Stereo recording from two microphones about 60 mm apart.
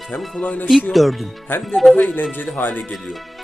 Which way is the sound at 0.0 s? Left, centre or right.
Centre.